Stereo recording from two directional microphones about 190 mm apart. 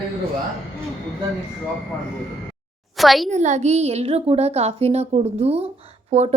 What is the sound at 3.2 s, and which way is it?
A woman's voice, 40° right (ahead or behind).